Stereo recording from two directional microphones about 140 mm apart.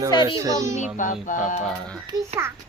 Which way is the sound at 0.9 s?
65° left (ahead or behind).